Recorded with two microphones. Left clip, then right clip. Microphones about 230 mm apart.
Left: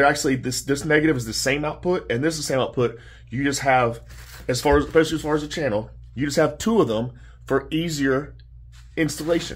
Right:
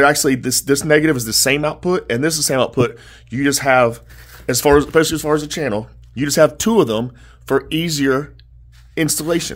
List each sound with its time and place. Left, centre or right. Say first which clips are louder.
0.0 s speech: right 5 dB; right